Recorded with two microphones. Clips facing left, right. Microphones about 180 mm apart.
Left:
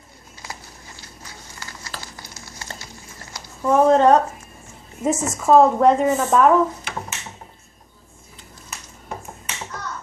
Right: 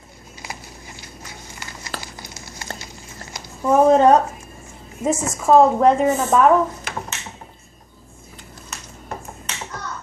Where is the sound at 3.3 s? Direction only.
15° right (ahead or behind).